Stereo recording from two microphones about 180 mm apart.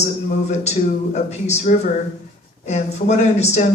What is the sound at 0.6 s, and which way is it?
Speech, 40° left (ahead or behind).